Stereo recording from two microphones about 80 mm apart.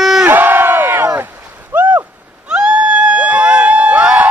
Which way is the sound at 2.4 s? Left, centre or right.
Centre.